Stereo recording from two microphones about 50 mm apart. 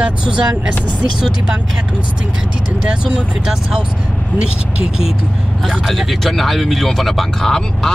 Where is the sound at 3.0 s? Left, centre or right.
Centre.